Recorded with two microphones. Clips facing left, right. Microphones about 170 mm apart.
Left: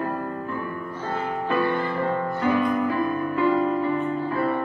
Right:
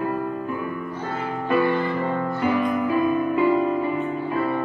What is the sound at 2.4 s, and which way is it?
Music, 15° right (ahead or behind).